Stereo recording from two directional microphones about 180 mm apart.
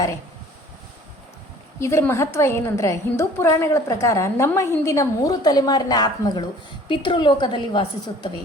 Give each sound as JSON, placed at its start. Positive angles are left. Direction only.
{"t": 1.8, "sound": "a woman's voice", "side_deg": 15}